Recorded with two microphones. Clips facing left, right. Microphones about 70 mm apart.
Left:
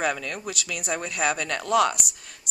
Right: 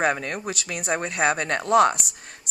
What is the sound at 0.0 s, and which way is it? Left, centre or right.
Speech, right.